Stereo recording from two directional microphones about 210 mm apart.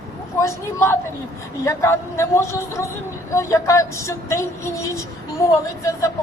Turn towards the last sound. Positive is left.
turn(degrees=15)  # may be behind; listen again after turning